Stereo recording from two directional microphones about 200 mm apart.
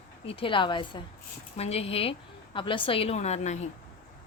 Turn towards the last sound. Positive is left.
turn(degrees=35)  # may be behind; listen again after turning